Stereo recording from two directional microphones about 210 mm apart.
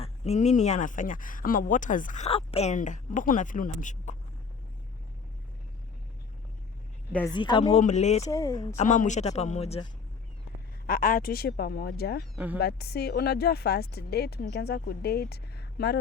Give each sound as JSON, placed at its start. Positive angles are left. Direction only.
{"t": 0.0, "sound": "speech", "side_deg": 30}
{"t": 7.3, "sound": "speech", "side_deg": 20}
{"t": 7.6, "sound": "speech", "side_deg": 35}
{"t": 8.3, "sound": "speech", "side_deg": 15}
{"t": 8.8, "sound": "speech", "side_deg": 35}
{"t": 10.8, "sound": "speech", "side_deg": 40}